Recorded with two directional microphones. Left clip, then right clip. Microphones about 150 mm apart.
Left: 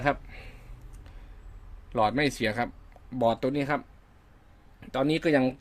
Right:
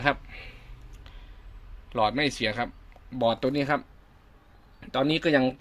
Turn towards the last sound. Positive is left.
turn(degrees=5)  # may be behind; listen again after turning